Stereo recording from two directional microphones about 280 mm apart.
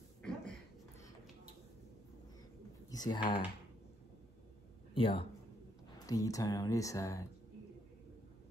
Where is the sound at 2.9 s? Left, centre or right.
Centre.